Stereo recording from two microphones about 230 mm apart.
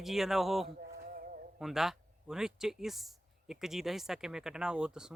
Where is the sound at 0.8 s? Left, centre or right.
Right.